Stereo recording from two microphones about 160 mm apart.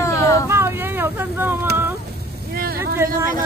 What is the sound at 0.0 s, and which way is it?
Vehicle, 20° left (ahead or behind).